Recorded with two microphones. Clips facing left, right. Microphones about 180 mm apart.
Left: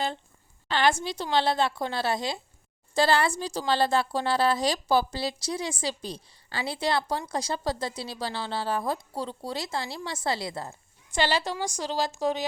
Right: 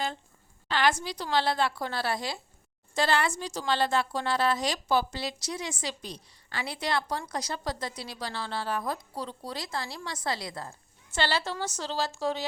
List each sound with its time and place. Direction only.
0.7 s a woman's voice: 25° left (ahead or behind)
2.9 s a woman's voice: 35° left (ahead or behind)
11.1 s a woman's voice: 15° left (ahead or behind)